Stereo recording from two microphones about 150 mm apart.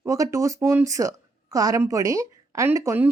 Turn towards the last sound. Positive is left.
turn(degrees=-15)  # may be behind; listen again after turning